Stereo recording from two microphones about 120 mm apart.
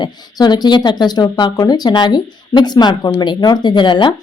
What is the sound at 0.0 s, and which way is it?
Speech, 35° left (ahead or behind).